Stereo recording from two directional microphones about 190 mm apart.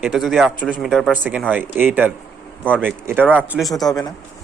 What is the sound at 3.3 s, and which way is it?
Speech, 5° right (ahead or behind).